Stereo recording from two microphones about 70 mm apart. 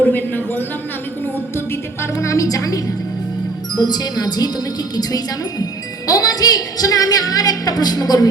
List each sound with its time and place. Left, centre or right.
0.0 s a sound: left
1.2 s music: left
2.1 s a woman's voice: left
3.8 s music: left
4.9 s a woman's voice: left